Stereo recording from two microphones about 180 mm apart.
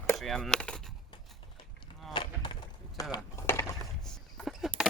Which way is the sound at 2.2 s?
25° left (ahead or behind).